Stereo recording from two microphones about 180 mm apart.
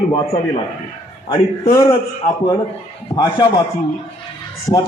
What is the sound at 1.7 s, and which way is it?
Speech, 20° left (ahead or behind).